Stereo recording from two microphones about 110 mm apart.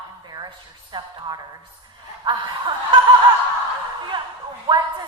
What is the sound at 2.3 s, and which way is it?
Speech, 45° right (ahead or behind).